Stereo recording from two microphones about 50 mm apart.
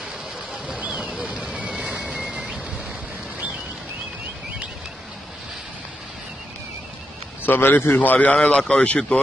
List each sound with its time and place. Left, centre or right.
0.5 s vehicle: right
2.1 s vehicle: centre
7.4 s a man's voice: left